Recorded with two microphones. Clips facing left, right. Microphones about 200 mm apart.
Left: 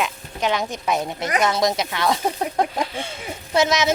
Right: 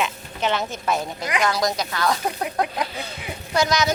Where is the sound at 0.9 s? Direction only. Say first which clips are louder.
Left 3 dB; 20° left (ahead or behind).